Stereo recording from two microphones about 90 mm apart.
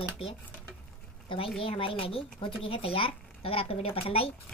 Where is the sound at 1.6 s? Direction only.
90° left.